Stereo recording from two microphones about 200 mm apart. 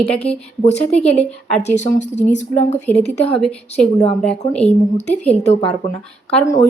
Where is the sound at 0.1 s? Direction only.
30° left (ahead or behind).